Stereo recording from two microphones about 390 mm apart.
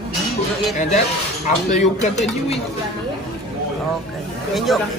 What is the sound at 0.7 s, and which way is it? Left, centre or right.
Speech, centre.